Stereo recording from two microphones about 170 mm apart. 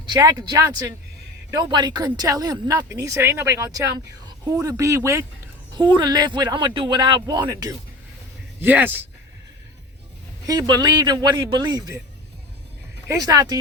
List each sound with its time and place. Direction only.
0.0 s speech: 20° right (ahead or behind)
10.4 s speech: 20° right (ahead or behind)
13.1 s speech: 20° right (ahead or behind)